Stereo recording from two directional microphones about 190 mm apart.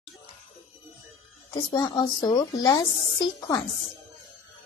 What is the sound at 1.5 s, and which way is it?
A child's voice, 20° left (ahead or behind).